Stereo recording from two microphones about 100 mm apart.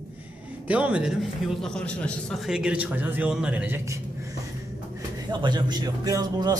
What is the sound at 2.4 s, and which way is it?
A man's voice, 10° right (ahead or behind).